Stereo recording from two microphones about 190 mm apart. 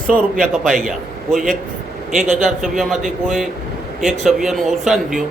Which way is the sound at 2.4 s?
Centre (ahead or behind).